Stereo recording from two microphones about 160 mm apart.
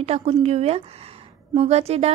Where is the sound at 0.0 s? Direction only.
40° right (ahead or behind).